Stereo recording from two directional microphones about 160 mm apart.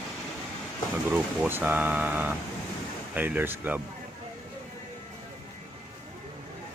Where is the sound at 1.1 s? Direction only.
10° right (ahead or behind).